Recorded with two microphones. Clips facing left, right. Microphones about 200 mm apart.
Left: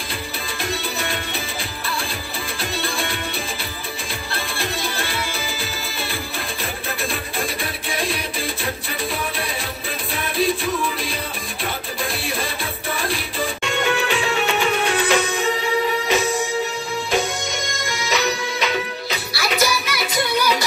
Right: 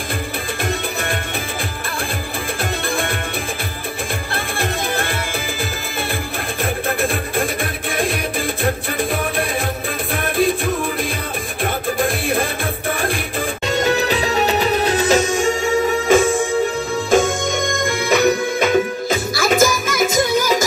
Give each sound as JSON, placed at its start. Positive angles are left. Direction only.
{"t": 4.3, "sound": "music", "side_deg": -50}
{"t": 6.6, "sound": "music", "side_deg": -50}
{"t": 13.7, "sound": "music", "side_deg": -40}